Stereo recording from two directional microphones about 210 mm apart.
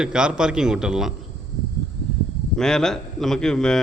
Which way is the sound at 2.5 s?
5° left (ahead or behind).